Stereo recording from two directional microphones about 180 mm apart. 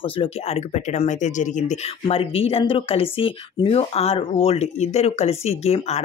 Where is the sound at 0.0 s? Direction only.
30° left (ahead or behind).